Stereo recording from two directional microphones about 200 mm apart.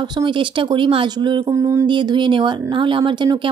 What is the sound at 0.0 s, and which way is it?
Speech, 25° right (ahead or behind).